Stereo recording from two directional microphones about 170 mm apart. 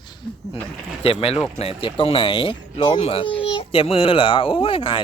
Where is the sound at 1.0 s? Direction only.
35° left (ahead or behind).